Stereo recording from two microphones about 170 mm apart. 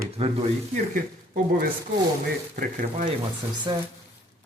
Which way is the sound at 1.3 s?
55° right (ahead or behind).